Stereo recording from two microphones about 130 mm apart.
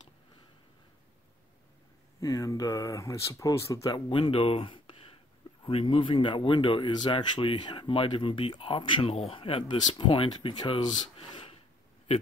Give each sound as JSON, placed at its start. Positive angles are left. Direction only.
{"t": 2.1, "sound": "speech", "side_deg": 25}
{"t": 4.1, "sound": "speech", "side_deg": 40}